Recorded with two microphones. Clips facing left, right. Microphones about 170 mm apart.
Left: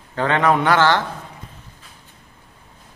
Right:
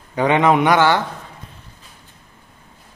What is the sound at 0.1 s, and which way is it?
Speech, 15° right (ahead or behind).